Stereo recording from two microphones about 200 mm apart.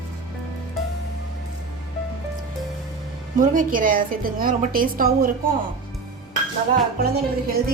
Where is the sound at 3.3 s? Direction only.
40° right (ahead or behind).